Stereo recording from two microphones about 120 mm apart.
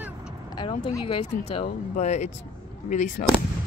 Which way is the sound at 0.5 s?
40° left (ahead or behind).